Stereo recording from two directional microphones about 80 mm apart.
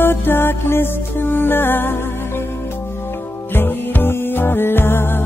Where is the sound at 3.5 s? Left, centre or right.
Left.